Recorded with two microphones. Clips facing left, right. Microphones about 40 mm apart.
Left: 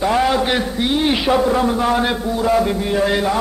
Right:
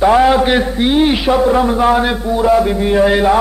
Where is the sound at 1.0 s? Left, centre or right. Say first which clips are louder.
Right 4 dB; centre.